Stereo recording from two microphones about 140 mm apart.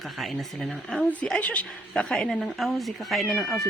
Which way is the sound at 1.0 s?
10° left (ahead or behind).